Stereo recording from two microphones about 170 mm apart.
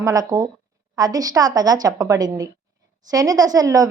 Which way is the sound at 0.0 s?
20° right (ahead or behind).